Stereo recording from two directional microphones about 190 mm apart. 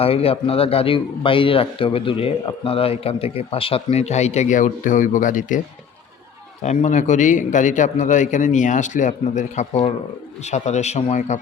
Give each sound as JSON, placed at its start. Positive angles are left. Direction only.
{"t": 0.0, "sound": "a man's voice", "side_deg": 30}